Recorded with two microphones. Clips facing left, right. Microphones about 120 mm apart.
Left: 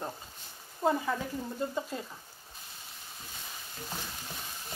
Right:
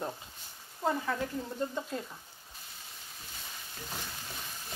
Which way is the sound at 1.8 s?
5° left (ahead or behind).